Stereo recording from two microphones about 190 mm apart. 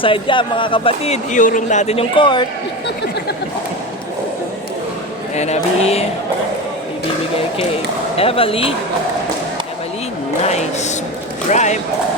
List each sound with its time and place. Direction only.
0.0 s speech: 25° left (ahead or behind)
5.3 s a woman's voice: 35° left (ahead or behind)
8.1 s speech: 30° left (ahead or behind)
10.4 s a woman's voice: 35° left (ahead or behind)